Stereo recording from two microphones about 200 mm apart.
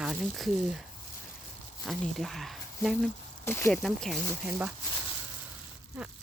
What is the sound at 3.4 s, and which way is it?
Speech, 10° left (ahead or behind).